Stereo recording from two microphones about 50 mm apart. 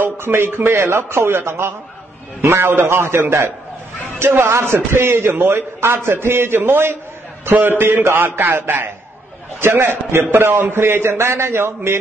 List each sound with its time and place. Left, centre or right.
0.0 s a man's voice: right
4.2 s a man's voice: right
4.5 s a man's voice: right